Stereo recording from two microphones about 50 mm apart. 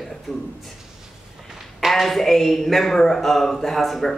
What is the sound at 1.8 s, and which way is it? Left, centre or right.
A man's voice, centre.